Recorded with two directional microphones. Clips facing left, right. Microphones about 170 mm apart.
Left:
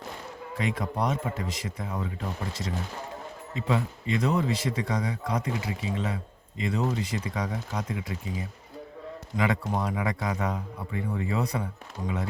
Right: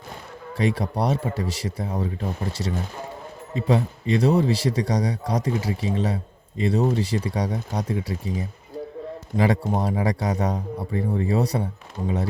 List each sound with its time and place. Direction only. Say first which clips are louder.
0.5 s a man's voice: right 6 dB; 35° right (ahead or behind)
3.5 s a man's voice: right 6 dB; 35° right (ahead or behind)